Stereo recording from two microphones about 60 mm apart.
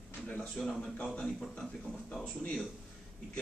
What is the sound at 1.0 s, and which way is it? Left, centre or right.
Speech, centre.